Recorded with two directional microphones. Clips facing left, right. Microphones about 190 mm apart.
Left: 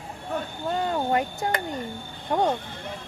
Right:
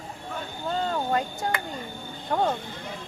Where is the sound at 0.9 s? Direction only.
20° left (ahead or behind).